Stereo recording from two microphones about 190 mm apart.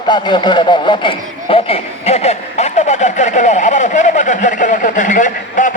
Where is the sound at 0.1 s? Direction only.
25° left (ahead or behind).